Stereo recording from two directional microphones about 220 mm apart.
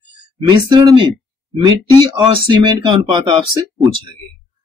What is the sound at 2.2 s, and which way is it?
Speech, 20° right (ahead or behind).